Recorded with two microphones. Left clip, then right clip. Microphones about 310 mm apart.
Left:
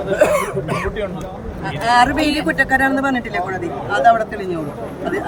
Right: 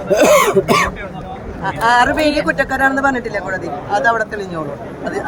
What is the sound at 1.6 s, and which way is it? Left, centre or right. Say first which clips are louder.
A woman's voice: right 2 dB; centre.